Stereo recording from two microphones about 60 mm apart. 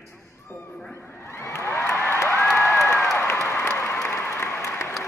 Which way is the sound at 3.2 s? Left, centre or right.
Left.